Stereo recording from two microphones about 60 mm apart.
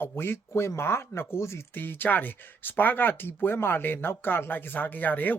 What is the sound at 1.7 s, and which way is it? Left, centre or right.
Speech, left.